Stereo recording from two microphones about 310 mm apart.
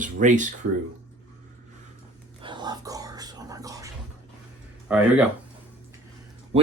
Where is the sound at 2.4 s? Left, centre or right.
Centre.